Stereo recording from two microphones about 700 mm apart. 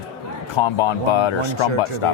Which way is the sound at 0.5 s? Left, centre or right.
Left.